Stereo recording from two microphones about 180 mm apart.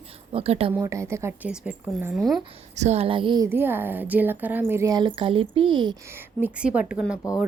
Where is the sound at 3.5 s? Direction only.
10° right (ahead or behind).